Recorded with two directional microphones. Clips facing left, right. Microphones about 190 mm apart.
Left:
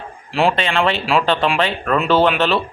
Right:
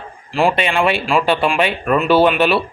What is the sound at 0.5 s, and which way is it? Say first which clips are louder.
Speech: right 2 dB; 15° right (ahead or behind).